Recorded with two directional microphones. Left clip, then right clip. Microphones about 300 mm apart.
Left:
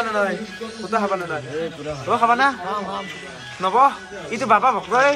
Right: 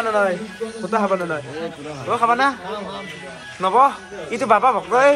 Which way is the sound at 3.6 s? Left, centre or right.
Centre.